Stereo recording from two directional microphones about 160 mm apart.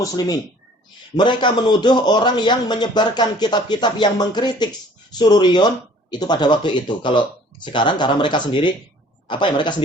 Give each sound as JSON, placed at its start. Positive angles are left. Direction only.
{"t": 1.1, "sound": "speech", "side_deg": 30}